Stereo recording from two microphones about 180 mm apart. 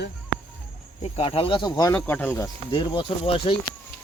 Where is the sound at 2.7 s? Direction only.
25° left (ahead or behind).